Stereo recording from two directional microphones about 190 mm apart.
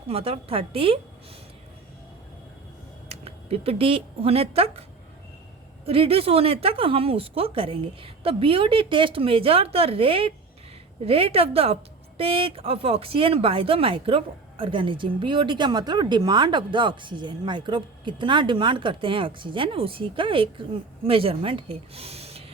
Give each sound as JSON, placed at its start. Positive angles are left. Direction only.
{"t": 0.1, "sound": "a woman's voice", "side_deg": -30}
{"t": 3.1, "sound": "a woman's voice", "side_deg": -30}